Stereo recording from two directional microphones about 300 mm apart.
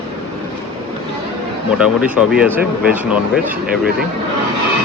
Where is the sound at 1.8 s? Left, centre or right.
Centre.